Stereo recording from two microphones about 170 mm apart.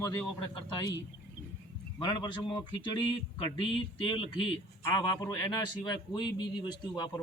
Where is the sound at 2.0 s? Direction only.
25° left (ahead or behind).